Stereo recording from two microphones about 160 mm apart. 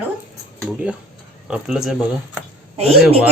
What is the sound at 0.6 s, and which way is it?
Speech, 5° right (ahead or behind).